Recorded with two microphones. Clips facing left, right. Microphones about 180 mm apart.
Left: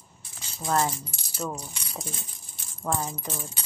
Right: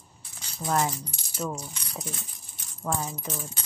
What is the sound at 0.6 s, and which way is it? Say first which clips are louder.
Speech: left 1 dB; 5° right (ahead or behind).